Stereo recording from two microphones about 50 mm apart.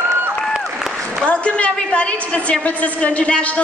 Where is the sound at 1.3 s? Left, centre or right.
Left.